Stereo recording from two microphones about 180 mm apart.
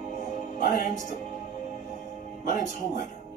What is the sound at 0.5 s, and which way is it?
Speech, 45° left (ahead or behind).